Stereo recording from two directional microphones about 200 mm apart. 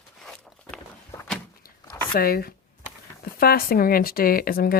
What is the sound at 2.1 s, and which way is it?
Speech, 50° left (ahead or behind).